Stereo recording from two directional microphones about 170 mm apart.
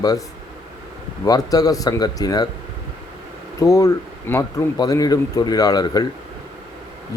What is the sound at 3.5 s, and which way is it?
Speech, 20° left (ahead or behind).